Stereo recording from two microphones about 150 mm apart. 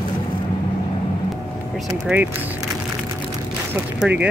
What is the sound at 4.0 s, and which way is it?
Speech, 10° right (ahead or behind).